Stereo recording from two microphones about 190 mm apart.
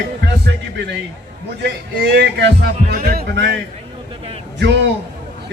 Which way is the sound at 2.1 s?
60° right (ahead or behind).